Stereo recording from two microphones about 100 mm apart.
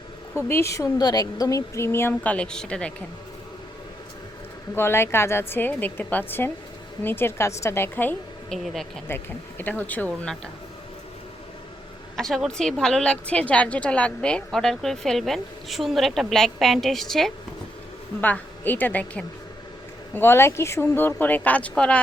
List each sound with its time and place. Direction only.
0.3 s speech: 25° left (ahead or behind)
2.2 s a woman's voice: 10° left (ahead or behind)
4.7 s speech: 25° left (ahead or behind)
8.4 s a woman's voice: centre (ahead or behind)
9.0 s a woman's voice: 20° left (ahead or behind)
12.1 s a woman's voice: 5° left (ahead or behind)
18.2 s a woman's voice: 20° left (ahead or behind)